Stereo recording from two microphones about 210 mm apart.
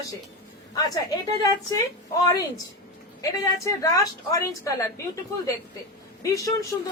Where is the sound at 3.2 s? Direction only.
15° left (ahead or behind).